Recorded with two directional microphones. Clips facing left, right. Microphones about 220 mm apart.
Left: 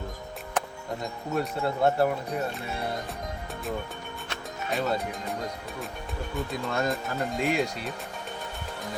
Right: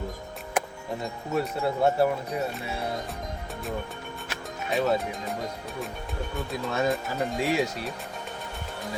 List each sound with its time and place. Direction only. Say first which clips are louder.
0.6 s music: right 2 dB; 10° right (ahead or behind)
1.4 s speech: right 1 dB; 5° right (ahead or behind)
4.3 s music: right 2 dB; centre (ahead or behind)
6.3 s speech: even; centre (ahead or behind)